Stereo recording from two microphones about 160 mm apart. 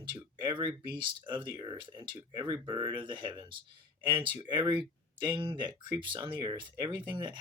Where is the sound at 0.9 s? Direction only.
30° right (ahead or behind).